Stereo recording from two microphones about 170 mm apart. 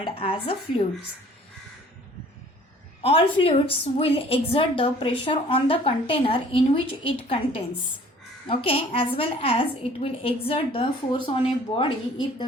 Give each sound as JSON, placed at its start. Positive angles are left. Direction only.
{"t": 0.0, "sound": "a woman's voice", "side_deg": 35}
{"t": 3.0, "sound": "a woman's voice", "side_deg": 30}